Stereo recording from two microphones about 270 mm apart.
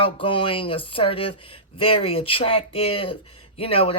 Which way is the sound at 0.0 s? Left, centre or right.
Centre.